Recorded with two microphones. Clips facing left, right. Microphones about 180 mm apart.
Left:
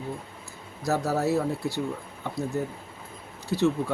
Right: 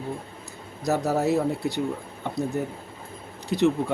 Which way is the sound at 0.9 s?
20° right (ahead or behind).